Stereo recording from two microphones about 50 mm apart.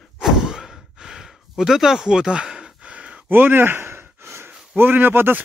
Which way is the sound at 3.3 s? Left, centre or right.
Right.